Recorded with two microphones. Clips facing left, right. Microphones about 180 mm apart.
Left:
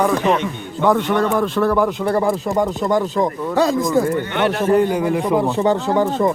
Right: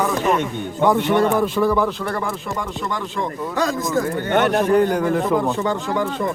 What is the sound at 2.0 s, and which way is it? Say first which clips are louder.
Speech: left 7 dB; 30° left (ahead or behind).